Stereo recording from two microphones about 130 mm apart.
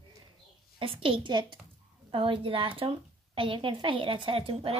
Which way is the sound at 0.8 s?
45° right (ahead or behind).